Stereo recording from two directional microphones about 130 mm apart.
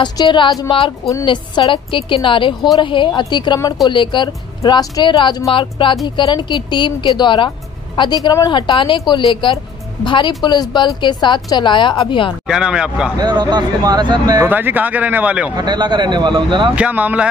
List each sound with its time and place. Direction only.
0.0 s speech: 35° left (ahead or behind)
12.4 s speech: 5° right (ahead or behind)
13.2 s speech: 35° right (ahead or behind)
14.4 s speech: 15° right (ahead or behind)
15.5 s speech: 35° right (ahead or behind)
16.7 s speech: 10° right (ahead or behind)